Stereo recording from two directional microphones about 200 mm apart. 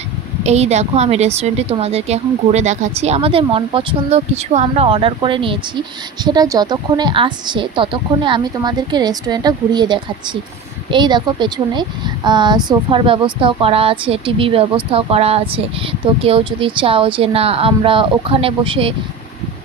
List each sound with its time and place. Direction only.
0.4 s a woman's voice: 35° right (ahead or behind)